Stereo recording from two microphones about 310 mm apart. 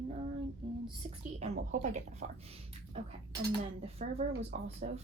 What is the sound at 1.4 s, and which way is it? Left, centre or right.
Speech, right.